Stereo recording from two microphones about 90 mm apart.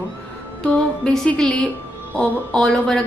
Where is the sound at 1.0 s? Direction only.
10° left (ahead or behind).